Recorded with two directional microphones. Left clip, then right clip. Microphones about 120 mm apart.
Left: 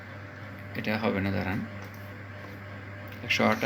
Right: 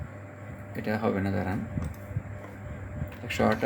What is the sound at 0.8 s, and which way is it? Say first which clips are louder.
Speech: even; 55° right (ahead or behind).